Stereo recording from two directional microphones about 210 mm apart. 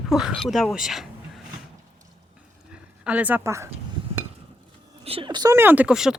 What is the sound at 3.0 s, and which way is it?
Speech, 5° right (ahead or behind).